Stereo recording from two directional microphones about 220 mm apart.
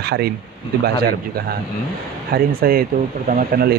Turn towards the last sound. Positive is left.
turn(degrees=-45)  # may be behind; listen again after turning